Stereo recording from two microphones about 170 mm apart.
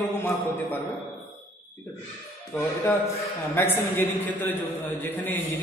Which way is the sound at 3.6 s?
10° left (ahead or behind).